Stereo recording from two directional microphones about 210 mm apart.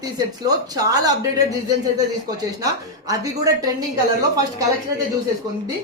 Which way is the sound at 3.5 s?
15° right (ahead or behind).